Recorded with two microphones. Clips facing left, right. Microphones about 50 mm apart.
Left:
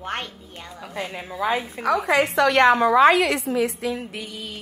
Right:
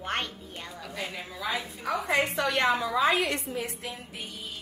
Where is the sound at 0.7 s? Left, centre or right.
Left.